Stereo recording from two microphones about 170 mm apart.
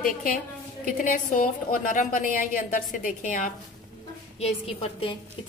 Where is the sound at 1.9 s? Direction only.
50° left (ahead or behind).